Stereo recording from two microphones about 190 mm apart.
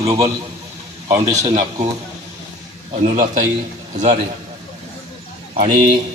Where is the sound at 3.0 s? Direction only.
40° right (ahead or behind).